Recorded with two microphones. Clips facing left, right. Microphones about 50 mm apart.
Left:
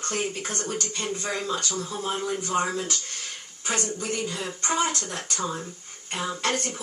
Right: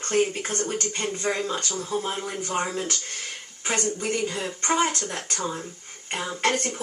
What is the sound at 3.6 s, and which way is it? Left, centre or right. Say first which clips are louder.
Speech: right 2 dB; right.